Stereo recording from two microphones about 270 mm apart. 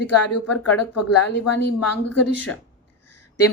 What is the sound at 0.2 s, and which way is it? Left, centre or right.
Speech, left.